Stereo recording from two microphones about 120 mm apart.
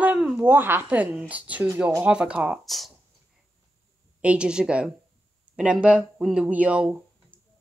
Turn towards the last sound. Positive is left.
turn(degrees=-10)  # may be behind; listen again after turning